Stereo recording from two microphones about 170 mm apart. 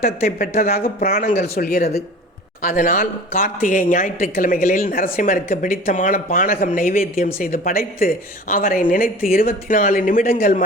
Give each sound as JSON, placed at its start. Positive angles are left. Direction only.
{"t": 0.0, "sound": "speech", "side_deg": 60}
{"t": 2.6, "sound": "speech", "side_deg": 55}